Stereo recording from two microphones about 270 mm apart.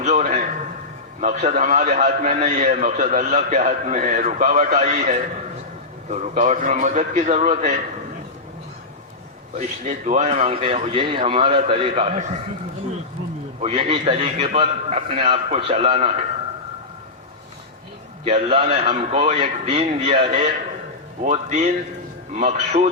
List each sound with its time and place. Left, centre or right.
0.0 s a man's voice: right
9.6 s a man's voice: right
13.6 s a man's voice: right
18.3 s a man's voice: right